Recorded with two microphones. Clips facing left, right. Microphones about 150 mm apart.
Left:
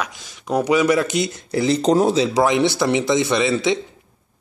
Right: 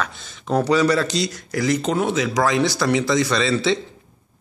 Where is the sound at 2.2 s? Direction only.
25° left (ahead or behind).